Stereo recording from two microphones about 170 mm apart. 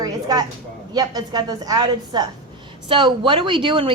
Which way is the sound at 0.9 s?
25° right (ahead or behind).